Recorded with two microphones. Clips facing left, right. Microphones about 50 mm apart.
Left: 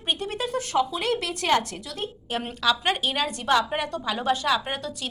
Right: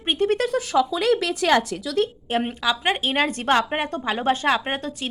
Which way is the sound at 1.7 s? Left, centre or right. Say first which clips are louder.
Right 8 dB; right.